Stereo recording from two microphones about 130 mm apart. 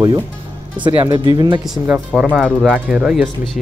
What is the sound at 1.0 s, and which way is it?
Speech, 35° right (ahead or behind).